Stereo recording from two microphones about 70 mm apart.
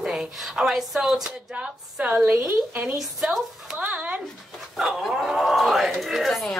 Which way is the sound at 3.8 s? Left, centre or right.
Right.